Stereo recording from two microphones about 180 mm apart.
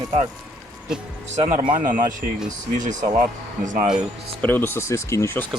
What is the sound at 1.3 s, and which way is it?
Speech, 35° right (ahead or behind).